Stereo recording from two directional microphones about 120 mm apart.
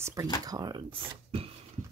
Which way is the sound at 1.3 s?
50° right (ahead or behind).